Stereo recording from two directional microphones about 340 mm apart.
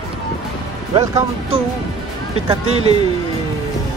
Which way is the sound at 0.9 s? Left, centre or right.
Centre.